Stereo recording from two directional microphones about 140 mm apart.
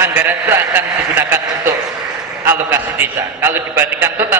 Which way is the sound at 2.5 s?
15° right (ahead or behind).